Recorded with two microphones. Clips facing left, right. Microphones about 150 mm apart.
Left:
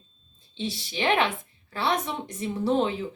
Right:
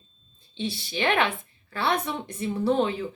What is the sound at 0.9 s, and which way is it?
Speech, 25° left (ahead or behind).